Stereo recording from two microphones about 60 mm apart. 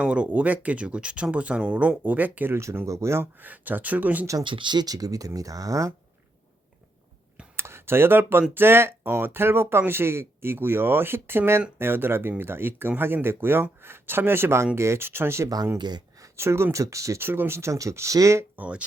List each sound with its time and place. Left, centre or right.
0.0 s speech: right
2.5 s speech: right
3.4 s speech: right
4.9 s speech: right
7.5 s speech: right
16.7 s speech: right
17.2 s speech: right
18.5 s speech: right